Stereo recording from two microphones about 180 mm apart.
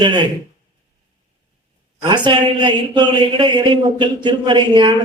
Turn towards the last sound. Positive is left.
turn(degrees=-25)  # may be behind; listen again after turning